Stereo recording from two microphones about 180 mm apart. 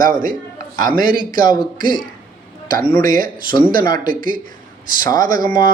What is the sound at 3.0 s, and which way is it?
Speech, 50° right (ahead or behind).